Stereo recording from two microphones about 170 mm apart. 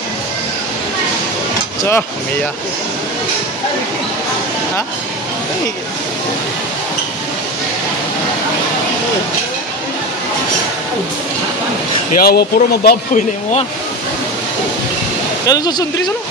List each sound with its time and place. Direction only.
1.8 s speech: 15° left (ahead or behind)
12.2 s speech: 65° left (ahead or behind)
15.4 s speech: 20° left (ahead or behind)